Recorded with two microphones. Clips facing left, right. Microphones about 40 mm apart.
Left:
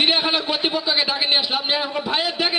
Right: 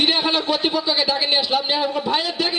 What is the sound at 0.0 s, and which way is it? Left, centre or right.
A man's voice, centre.